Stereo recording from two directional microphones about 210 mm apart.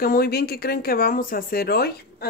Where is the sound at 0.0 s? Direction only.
45° left (ahead or behind).